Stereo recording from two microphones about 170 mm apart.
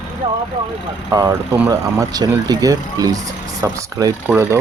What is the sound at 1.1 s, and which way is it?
Speech, 20° right (ahead or behind).